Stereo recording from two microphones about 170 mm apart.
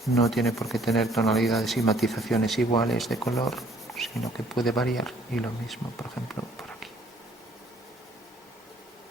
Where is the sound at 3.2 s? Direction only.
20° left (ahead or behind).